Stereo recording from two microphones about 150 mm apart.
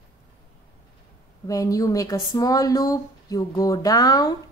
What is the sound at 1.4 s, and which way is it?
Speech, 20° left (ahead or behind).